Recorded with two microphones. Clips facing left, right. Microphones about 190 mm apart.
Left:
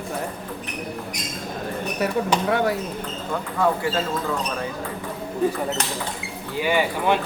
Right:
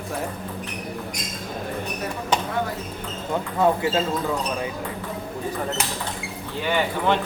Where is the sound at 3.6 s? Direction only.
25° right (ahead or behind).